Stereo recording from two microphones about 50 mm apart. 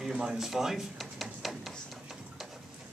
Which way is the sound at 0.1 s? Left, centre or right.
Centre.